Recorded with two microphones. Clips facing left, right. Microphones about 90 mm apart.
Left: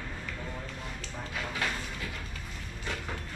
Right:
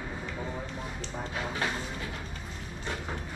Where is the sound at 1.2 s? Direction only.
20° right (ahead or behind).